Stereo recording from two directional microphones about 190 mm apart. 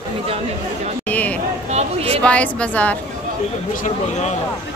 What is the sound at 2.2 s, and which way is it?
Speech, 5° left (ahead or behind).